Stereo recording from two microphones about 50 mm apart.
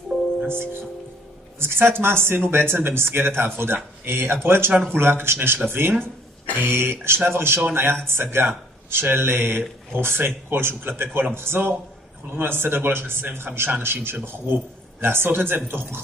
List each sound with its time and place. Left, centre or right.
0.5 s speech: right
6.8 s speech: right